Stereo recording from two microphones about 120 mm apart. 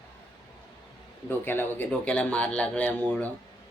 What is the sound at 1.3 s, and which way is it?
Speech, 15° left (ahead or behind).